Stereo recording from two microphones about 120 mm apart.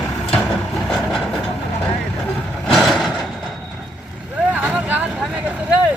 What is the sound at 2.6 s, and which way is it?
Vehicle, centre (ahead or behind).